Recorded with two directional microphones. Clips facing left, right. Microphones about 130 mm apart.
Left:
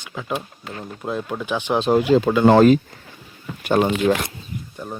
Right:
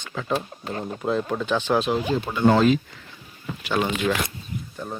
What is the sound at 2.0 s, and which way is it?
Speech, 85° left.